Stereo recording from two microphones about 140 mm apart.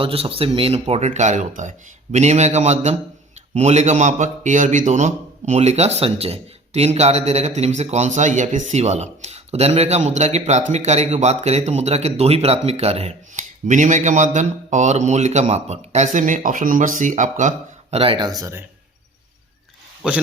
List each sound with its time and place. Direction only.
0.0 s a man's voice: 45° right (ahead or behind); by 17.5 s 65° right (ahead or behind)
17.9 s speech: 40° right (ahead or behind)
18.3 s speech: 25° right (ahead or behind)
20.0 s speech: 10° right (ahead or behind)